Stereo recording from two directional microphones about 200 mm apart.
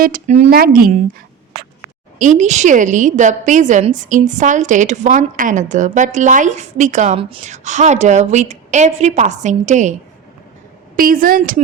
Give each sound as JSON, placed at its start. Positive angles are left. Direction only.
{"t": 0.0, "sound": "a woman's voice", "side_deg": -40}
{"t": 0.5, "sound": "speech", "side_deg": -50}
{"t": 2.1, "sound": "a woman's voice", "side_deg": -40}
{"t": 10.9, "sound": "speech", "side_deg": -45}